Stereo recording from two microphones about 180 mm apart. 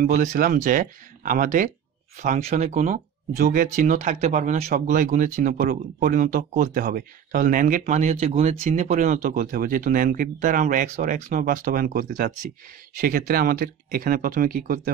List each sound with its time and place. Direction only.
0.1 s speech: 45° right (ahead or behind)